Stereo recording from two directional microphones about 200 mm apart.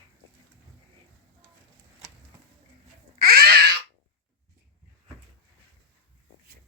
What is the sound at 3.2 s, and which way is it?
Cat, 50° right (ahead or behind).